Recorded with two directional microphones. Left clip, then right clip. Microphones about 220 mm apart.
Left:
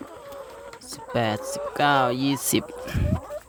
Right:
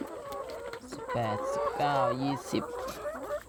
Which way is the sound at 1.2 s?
35° left (ahead or behind).